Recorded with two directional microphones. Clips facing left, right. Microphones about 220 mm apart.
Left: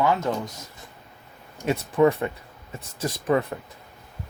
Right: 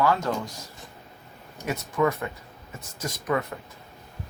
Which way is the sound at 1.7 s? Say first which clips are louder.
Left 5 dB; 30° left (ahead or behind).